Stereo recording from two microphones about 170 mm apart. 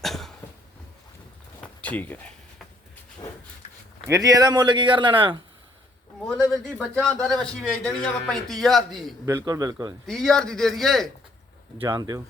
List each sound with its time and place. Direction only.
0.0 s cough: centre (ahead or behind)
1.6 s a sound: 10° left (ahead or behind)
4.0 s speech: 20° right (ahead or behind)
6.7 s a man's voice: 5° left (ahead or behind)
9.2 s speech: 15° right (ahead or behind)
10.1 s a man's voice: centre (ahead or behind)
11.9 s speech: 20° right (ahead or behind)